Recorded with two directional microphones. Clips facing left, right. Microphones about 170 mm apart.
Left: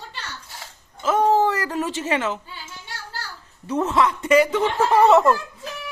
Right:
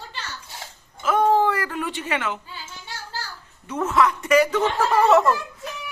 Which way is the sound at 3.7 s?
30° left (ahead or behind).